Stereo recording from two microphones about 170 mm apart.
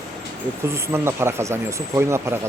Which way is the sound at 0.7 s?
15° right (ahead or behind).